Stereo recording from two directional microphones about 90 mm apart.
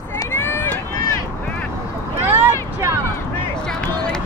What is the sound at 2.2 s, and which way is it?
Vehicle, 25° right (ahead or behind).